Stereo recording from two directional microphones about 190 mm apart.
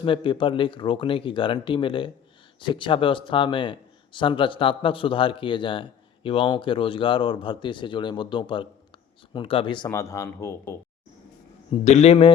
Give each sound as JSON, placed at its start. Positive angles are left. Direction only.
{"t": 0.0, "sound": "speech", "side_deg": 25}
{"t": 11.7, "sound": "a man's voice", "side_deg": 35}